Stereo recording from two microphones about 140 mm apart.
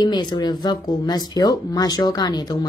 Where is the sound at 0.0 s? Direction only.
30° left (ahead or behind).